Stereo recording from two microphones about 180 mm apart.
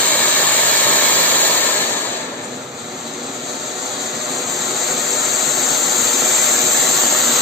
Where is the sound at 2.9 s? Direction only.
Centre (ahead or behind).